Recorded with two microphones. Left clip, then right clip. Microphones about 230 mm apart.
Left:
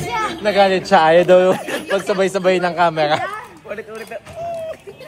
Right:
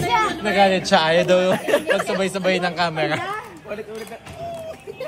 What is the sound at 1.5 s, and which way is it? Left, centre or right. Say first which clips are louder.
Speech: right 5 dB; centre.